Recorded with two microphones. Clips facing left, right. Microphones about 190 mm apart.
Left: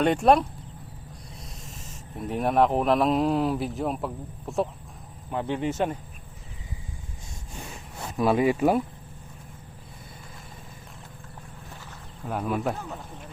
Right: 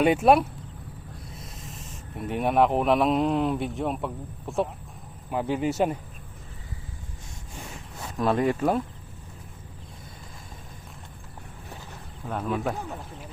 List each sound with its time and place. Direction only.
0.0 s speech: 5° right (ahead or behind)
8.2 s speech: 5° left (ahead or behind)
12.3 s speech: 5° left (ahead or behind)